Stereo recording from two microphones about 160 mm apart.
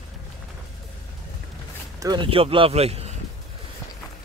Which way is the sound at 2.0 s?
25° right (ahead or behind).